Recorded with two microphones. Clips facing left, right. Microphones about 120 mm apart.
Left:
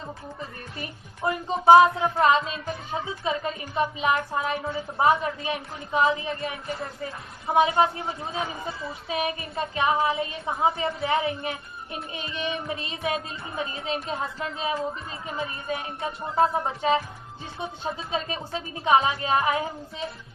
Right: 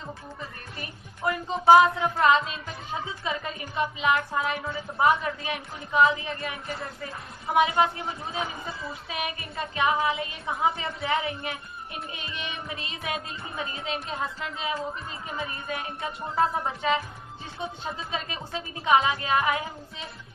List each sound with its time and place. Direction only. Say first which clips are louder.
0.8 s a woman's voice: left 2 dB; 25° left (ahead or behind)